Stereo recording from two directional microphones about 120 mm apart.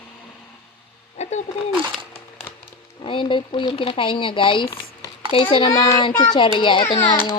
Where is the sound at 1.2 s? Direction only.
70° left (ahead or behind).